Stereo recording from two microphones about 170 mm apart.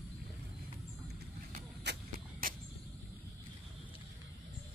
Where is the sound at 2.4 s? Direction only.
55° right (ahead or behind).